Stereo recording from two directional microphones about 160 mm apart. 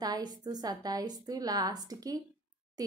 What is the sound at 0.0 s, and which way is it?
Speech, 25° right (ahead or behind).